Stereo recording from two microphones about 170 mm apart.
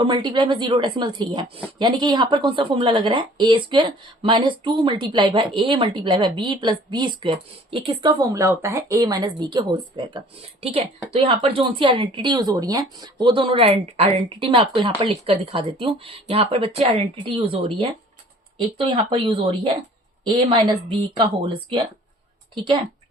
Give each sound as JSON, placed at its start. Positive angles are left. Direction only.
{"t": 0.0, "sound": "speech", "side_deg": -25}
{"t": 10.2, "sound": "speech", "side_deg": -35}